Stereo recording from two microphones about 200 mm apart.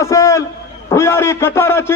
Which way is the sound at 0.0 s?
15° left (ahead or behind).